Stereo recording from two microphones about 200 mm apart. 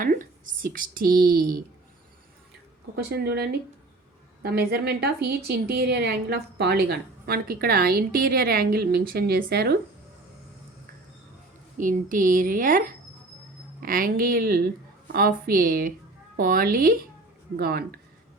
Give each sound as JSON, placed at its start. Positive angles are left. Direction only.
{"t": 0.0, "sound": "a sound", "side_deg": -45}
{"t": 2.9, "sound": "a woman's voice", "side_deg": -55}
{"t": 4.7, "sound": "a woman's voice", "side_deg": -55}
{"t": 11.8, "sound": "a woman's voice", "side_deg": -40}